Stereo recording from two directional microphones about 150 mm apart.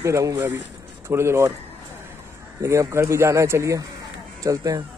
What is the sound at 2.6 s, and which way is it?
Speech, 20° right (ahead or behind).